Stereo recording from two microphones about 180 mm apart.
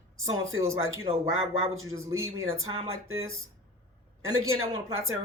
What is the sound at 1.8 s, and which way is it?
Speech, 15° right (ahead or behind).